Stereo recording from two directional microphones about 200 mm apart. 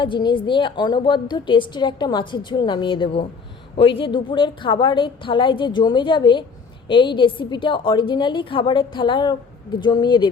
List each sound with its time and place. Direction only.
0.0 s a woman's voice: 25° left (ahead or behind)